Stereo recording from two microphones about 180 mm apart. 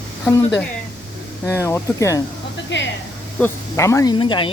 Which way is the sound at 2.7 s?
80° left.